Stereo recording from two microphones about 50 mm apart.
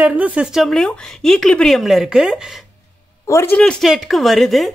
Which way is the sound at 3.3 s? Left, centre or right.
Left.